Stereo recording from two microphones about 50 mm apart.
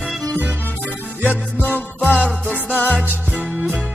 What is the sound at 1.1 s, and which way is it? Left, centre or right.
Music, right.